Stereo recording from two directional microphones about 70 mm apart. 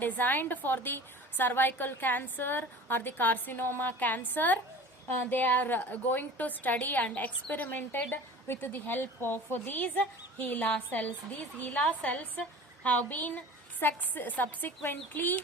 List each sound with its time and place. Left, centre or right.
0.0 s a woman's voice: left